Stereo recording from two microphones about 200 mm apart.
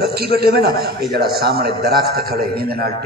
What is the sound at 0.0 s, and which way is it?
A man's voice, 50° right (ahead or behind).